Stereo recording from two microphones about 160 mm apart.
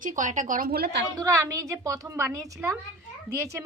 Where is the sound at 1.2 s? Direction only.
20° right (ahead or behind).